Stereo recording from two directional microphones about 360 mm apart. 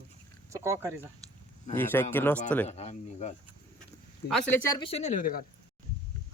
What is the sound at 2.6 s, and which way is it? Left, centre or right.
Speech, centre.